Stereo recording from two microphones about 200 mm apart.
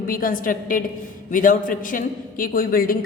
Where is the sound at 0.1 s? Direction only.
45° left (ahead or behind).